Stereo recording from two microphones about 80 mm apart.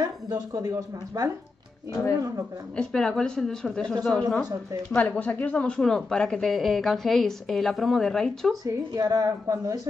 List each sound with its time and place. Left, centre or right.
0.0 s speech: right
2.7 s a woman's voice: centre
4.9 s speech: centre
8.6 s speech: right